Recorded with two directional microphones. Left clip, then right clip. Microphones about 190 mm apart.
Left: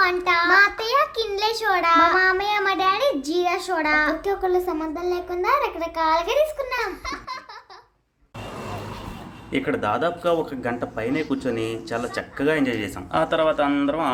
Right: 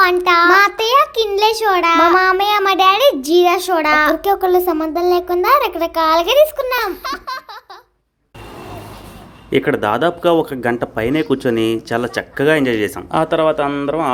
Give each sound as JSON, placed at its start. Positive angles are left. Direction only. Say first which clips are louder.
{"t": 0.0, "sound": "a child's voice", "louder": "right 8 dB", "side_deg": -40}
{"t": 9.5, "sound": "speech", "louder": "right 8 dB", "side_deg": -40}